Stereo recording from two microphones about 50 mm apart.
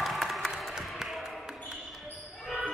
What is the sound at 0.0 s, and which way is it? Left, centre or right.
Applause, centre.